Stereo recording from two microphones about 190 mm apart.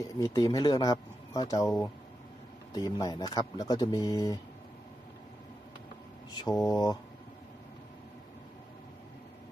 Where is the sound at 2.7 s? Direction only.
20° left (ahead or behind).